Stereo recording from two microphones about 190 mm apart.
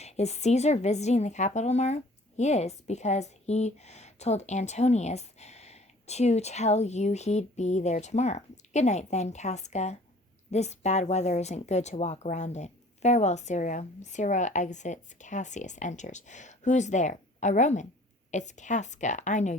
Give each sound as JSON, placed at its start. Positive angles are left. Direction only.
{"t": 0.0, "sound": "a woman's voice", "side_deg": 35}